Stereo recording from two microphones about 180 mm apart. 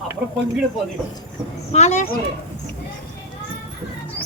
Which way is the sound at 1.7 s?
40° left (ahead or behind).